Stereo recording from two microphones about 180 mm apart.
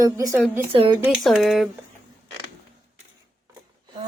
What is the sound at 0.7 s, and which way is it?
Speech, 30° right (ahead or behind).